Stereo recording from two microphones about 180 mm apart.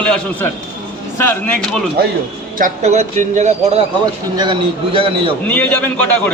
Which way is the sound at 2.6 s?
40° right (ahead or behind).